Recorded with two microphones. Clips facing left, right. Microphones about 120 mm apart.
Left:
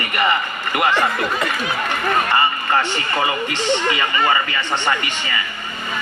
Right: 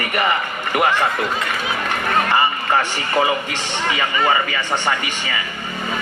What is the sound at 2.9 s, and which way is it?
Speech, 15° right (ahead or behind).